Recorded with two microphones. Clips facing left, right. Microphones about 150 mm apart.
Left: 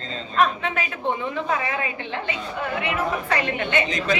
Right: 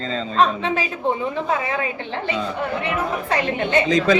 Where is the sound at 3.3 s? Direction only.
35° right (ahead or behind).